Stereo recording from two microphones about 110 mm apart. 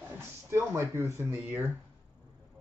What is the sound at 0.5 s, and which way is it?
Speech, 25° right (ahead or behind).